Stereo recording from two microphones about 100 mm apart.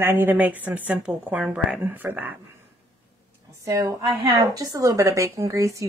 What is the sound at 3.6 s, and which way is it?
A woman's voice, 30° right (ahead or behind).